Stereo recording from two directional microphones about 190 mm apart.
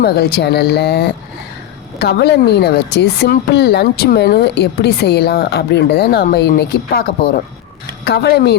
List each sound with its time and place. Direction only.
0.0 s speech: 55° left (ahead or behind)
8.0 s speech: 60° left (ahead or behind)